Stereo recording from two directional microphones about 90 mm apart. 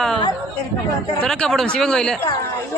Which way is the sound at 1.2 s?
10° left (ahead or behind).